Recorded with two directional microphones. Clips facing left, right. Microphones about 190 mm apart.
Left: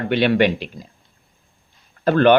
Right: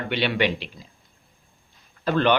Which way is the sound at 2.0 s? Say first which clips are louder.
Left 7 dB; 50° left (ahead or behind).